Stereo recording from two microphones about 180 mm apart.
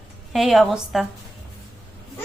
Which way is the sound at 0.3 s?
Centre (ahead or behind).